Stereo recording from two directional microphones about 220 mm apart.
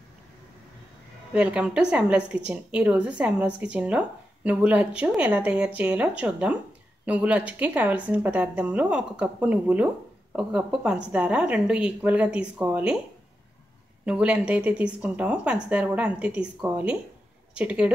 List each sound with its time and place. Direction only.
1.3 s a woman's voice: 5° right (ahead or behind)
14.0 s a woman's voice: 5° right (ahead or behind)